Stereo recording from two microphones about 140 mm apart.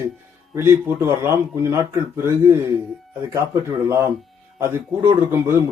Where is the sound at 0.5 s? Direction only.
20° right (ahead or behind).